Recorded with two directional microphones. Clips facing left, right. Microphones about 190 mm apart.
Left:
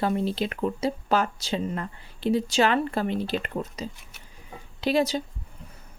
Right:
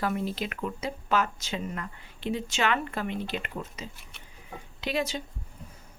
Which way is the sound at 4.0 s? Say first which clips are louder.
Even; 5° left (ahead or behind).